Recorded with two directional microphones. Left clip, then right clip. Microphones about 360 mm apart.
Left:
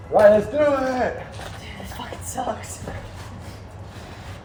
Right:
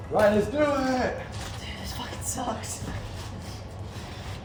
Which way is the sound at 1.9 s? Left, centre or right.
Centre.